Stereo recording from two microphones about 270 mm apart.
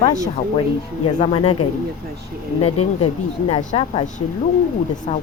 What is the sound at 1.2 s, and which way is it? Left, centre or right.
Speech, centre.